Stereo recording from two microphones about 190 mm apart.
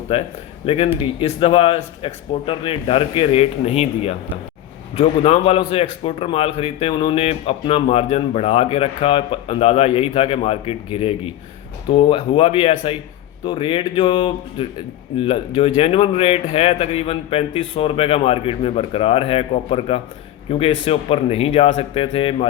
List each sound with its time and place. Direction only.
0.1 s speech: 30° left (ahead or behind)